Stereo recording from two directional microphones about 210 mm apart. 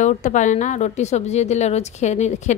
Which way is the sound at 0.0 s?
35° left (ahead or behind).